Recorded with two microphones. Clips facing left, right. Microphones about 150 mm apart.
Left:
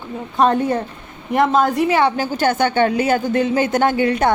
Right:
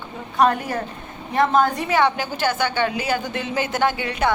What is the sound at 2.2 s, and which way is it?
Speech, 45° left (ahead or behind).